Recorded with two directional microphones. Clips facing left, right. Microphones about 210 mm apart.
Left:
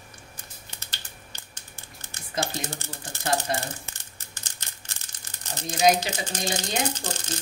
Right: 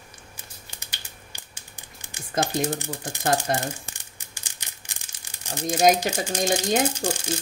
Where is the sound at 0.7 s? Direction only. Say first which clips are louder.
Even; 15° right (ahead or behind).